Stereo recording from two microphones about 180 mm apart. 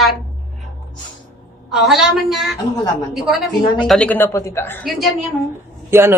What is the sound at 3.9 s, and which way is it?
Speech, 5° left (ahead or behind).